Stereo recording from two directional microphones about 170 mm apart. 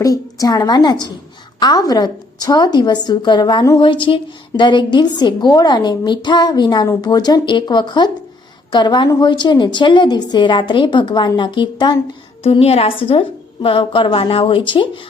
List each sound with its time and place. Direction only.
0.0 s a woman's voice: 20° left (ahead or behind)